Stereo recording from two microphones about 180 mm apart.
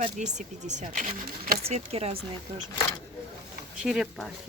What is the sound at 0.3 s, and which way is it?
Speech, 40° right (ahead or behind).